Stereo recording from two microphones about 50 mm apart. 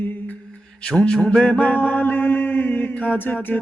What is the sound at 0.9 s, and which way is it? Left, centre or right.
Mantra, centre.